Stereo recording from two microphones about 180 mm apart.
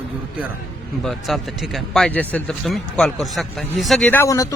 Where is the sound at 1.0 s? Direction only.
Centre (ahead or behind).